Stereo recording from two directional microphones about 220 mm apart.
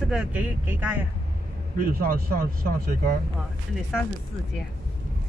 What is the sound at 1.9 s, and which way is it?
Speech, 40° right (ahead or behind).